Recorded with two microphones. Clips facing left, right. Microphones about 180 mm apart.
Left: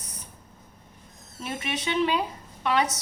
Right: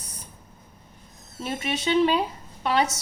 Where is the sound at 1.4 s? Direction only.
30° right (ahead or behind).